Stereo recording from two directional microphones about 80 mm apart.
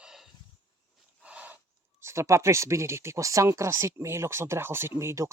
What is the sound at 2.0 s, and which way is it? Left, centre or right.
Speech, right.